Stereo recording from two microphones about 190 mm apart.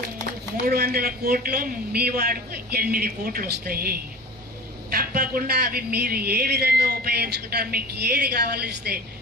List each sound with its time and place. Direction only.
0.6 s a man's voice: 55° right (ahead or behind)